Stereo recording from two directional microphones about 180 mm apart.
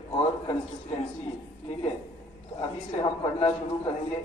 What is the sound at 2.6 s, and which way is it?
A man's voice, 25° left (ahead or behind).